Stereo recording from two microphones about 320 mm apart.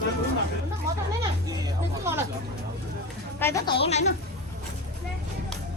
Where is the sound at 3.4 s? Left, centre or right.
Centre.